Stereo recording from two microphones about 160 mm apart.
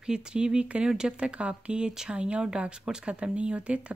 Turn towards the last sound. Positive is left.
turn(degrees=-5)  # may be behind; listen again after turning